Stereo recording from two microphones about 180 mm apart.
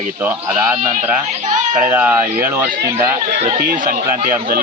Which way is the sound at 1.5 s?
45° right (ahead or behind).